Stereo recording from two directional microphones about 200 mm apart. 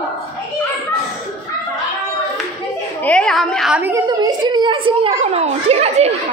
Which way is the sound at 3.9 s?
20° right (ahead or behind).